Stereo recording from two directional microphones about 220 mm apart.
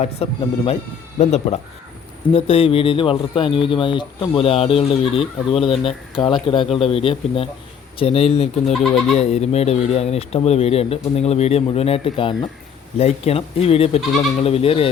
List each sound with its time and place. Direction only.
0.0 s speech: 25° left (ahead or behind)
8.7 s speech: centre (ahead or behind)
9.1 s speech: 30° left (ahead or behind)